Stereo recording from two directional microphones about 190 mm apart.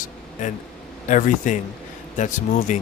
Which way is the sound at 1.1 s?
45° left (ahead or behind).